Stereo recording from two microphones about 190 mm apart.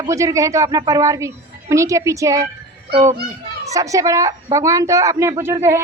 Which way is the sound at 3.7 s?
15° right (ahead or behind).